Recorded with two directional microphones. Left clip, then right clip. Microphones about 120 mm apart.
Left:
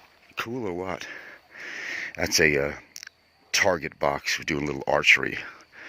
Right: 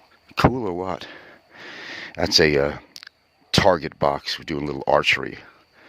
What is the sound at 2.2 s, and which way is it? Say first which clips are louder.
Speech: right 4 dB; 30° right (ahead or behind).